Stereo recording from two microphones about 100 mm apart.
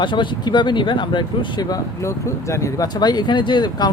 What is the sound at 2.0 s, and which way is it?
Speech, 30° left (ahead or behind).